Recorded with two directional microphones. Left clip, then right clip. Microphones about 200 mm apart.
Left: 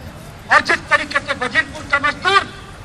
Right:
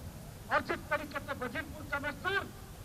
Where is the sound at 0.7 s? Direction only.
40° left (ahead or behind).